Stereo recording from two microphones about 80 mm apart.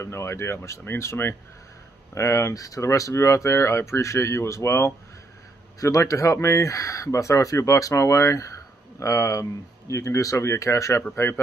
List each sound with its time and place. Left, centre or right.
0.0 s speech: left
5.8 s speech: left